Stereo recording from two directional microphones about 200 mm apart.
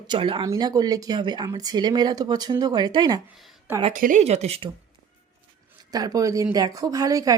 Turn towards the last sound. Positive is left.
turn(degrees=-15)  # may be behind; listen again after turning